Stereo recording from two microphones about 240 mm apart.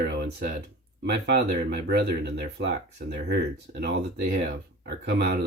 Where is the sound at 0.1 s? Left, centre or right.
Right.